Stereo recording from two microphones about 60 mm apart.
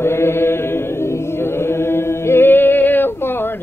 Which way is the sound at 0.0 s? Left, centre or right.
Left.